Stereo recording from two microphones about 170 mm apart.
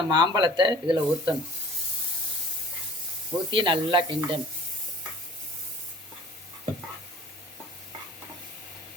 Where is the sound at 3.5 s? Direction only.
30° right (ahead or behind).